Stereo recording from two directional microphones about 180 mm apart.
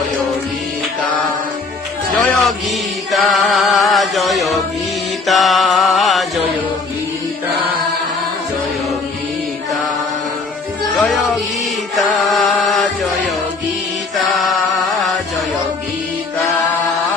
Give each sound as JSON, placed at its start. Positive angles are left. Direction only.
{"t": 2.2, "sound": "music", "side_deg": 0}
{"t": 10.9, "sound": "music", "side_deg": 0}
{"t": 11.9, "sound": "chant", "side_deg": 0}
{"t": 14.2, "sound": "chant", "side_deg": 0}